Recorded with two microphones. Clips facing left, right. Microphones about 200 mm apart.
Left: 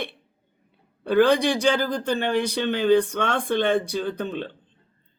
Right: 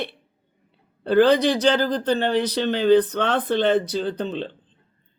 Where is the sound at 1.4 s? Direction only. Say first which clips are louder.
Right 2 dB; 10° left (ahead or behind).